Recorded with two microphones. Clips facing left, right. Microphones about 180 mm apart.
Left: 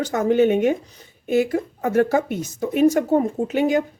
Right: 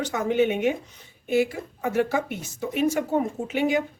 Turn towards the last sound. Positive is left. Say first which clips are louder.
# left 4 dB
turn(degrees=40)  # may be behind; listen again after turning